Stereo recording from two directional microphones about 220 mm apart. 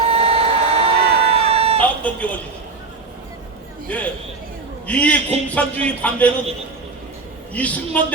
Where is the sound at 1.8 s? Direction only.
5° left (ahead or behind).